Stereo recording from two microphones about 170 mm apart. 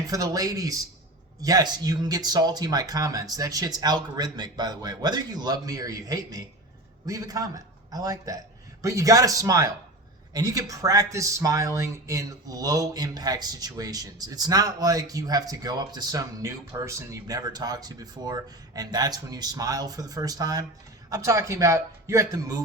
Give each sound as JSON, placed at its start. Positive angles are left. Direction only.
{"t": 0.1, "sound": "a man's voice", "side_deg": -20}